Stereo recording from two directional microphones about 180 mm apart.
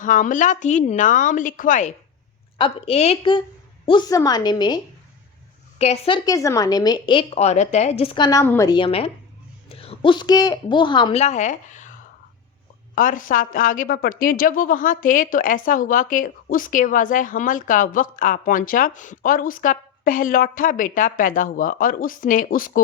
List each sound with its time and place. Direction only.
0.0 s a woman's voice: 45° left (ahead or behind)
2.6 s a woman's voice: 30° left (ahead or behind)
5.8 s a woman's voice: 35° left (ahead or behind)
6.2 s a woman's voice: 20° left (ahead or behind)
11.1 s speech: 40° left (ahead or behind)
13.0 s a woman's voice: 50° left (ahead or behind)